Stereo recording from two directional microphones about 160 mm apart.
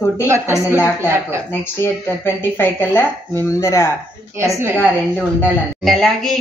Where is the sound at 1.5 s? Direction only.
15° left (ahead or behind).